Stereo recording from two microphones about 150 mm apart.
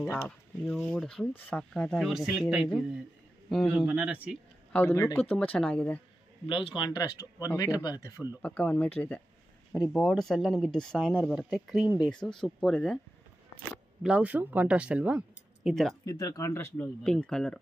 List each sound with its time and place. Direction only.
0.0 s a man's voice: 15° left (ahead or behind)
3.7 s speech: 10° right (ahead or behind)
4.7 s speech: 15° left (ahead or behind)
6.4 s speech: 35° left (ahead or behind)
8.4 s speech: 10° left (ahead or behind)
14.0 s speech: 10° right (ahead or behind)
16.1 s speech: 25° left (ahead or behind); by 17.6 s 5° left (ahead or behind)